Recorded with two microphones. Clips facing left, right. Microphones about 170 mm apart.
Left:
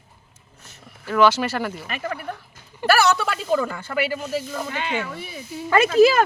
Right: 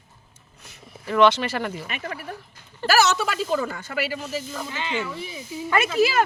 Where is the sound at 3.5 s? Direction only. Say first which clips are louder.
Left 7 dB; 55° left (ahead or behind).